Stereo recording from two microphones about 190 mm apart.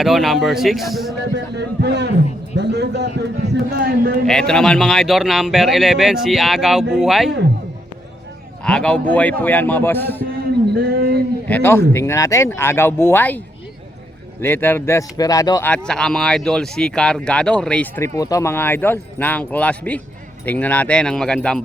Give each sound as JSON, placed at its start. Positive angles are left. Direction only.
{"t": 0.0, "sound": "speech", "side_deg": 0}
{"t": 1.5, "sound": "a man's voice", "side_deg": -60}
{"t": 4.3, "sound": "speech", "side_deg": 5}
{"t": 8.6, "sound": "speech", "side_deg": 5}
{"t": 10.8, "sound": "a sound", "side_deg": -55}
{"t": 11.4, "sound": "speech", "side_deg": 10}
{"t": 14.4, "sound": "speech", "side_deg": 10}
{"t": 15.7, "sound": "speech", "side_deg": 5}